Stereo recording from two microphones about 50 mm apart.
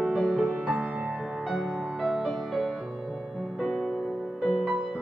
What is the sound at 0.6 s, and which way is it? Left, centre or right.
Music, centre.